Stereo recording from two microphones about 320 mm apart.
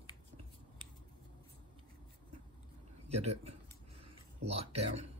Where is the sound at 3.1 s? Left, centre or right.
Centre.